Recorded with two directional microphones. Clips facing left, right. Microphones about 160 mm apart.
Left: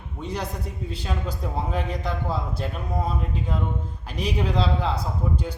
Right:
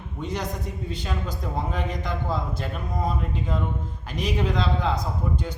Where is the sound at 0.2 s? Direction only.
30° left (ahead or behind).